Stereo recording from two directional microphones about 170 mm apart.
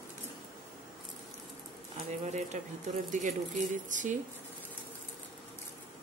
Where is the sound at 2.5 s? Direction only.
45° right (ahead or behind).